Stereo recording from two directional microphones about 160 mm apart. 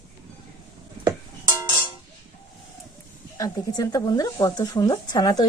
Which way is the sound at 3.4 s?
20° left (ahead or behind).